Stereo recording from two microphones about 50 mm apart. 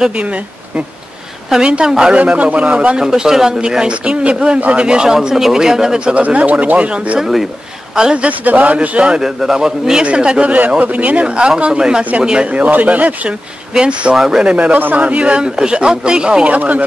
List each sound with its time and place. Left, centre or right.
0.1 s speech: right
2.3 s speech: right
3.0 s speech: centre; by 4.8 s right
4.8 s speech: centre
6.2 s a man's voice: right
7.2 s speech: centre
7.9 s speech: centre
8.3 s a man's voice: right
9.2 s speech: centre
14.1 s speech: centre
14.4 s speech: right